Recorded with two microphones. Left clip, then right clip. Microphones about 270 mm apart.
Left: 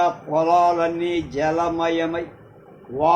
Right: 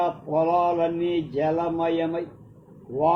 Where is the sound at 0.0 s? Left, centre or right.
Left.